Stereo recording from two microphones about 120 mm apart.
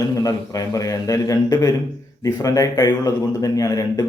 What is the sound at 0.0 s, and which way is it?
A man's voice, 30° left (ahead or behind).